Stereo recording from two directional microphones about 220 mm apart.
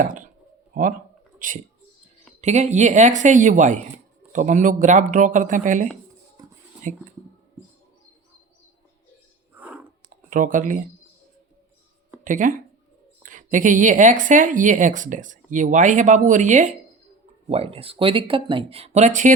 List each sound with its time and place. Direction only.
0.0 s a woman's voice: 35° right (ahead or behind)
9.6 s a sound: 5° right (ahead or behind)
10.1 s speech: 35° right (ahead or behind)
12.2 s a woman's voice: 35° right (ahead or behind)